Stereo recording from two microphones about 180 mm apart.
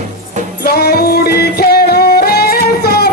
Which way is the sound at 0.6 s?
65° left (ahead or behind).